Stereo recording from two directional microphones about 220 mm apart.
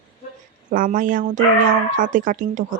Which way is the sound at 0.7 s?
40° right (ahead or behind).